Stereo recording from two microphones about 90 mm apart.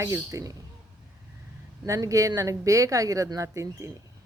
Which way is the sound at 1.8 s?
35° right (ahead or behind).